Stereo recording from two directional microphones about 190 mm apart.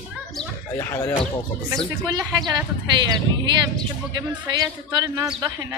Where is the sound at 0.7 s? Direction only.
15° left (ahead or behind).